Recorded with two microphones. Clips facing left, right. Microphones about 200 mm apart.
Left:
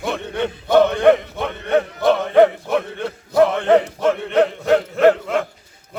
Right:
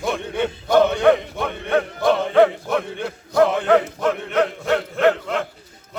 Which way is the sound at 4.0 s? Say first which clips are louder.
Left 3 dB; 30° left (ahead or behind).